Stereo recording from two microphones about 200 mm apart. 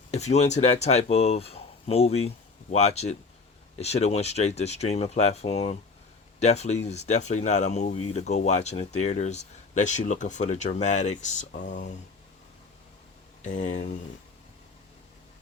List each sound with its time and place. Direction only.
0.1 s speech: 35° left (ahead or behind)
13.4 s speech: 40° left (ahead or behind)